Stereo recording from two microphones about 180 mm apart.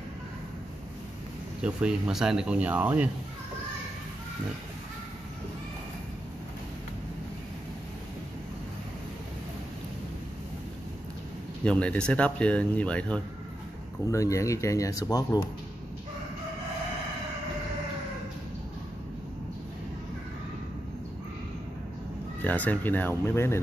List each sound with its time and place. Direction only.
1.6 s speech: 5° right (ahead or behind)
11.6 s speech: 5° left (ahead or behind)
14.1 s speech: 15° left (ahead or behind)
22.4 s speech: 10° left (ahead or behind)